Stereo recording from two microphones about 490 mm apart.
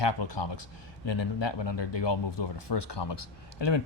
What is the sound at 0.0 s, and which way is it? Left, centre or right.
Speech, left.